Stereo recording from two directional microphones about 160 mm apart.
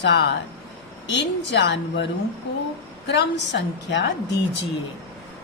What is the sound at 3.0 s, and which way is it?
A woman's voice, 90° left.